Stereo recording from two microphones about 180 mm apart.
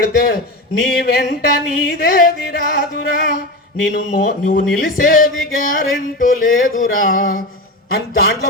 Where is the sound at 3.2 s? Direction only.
55° left (ahead or behind).